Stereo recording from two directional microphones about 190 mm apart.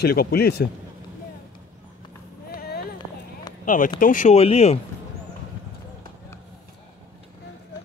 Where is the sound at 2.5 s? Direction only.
55° left (ahead or behind).